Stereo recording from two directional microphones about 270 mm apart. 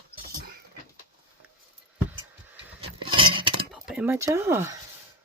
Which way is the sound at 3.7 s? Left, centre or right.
Centre.